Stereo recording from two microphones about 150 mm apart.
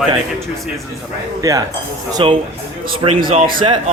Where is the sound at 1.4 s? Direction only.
25° right (ahead or behind).